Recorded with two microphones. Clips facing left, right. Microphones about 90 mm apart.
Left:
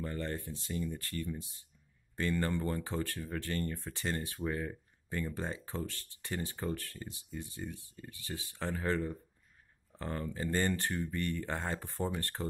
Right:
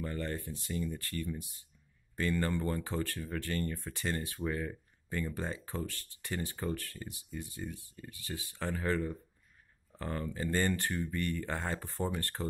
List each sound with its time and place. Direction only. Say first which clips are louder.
0.0 s speech: right 1 dB; 20° left (ahead or behind)